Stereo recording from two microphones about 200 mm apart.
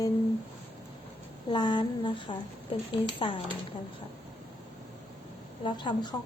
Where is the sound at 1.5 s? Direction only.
20° left (ahead or behind).